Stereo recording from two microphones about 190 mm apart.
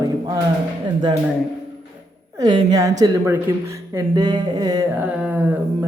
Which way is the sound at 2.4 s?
20° right (ahead or behind).